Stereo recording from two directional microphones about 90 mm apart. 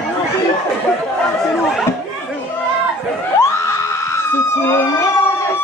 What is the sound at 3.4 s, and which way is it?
Screaming, 30° left (ahead or behind).